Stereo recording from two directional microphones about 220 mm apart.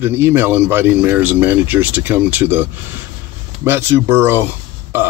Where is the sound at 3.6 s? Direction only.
10° right (ahead or behind).